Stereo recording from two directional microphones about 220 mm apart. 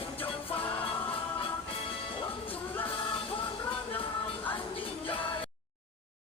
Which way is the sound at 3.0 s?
25° left (ahead or behind).